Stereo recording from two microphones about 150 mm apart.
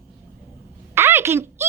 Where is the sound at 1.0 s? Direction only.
15° right (ahead or behind).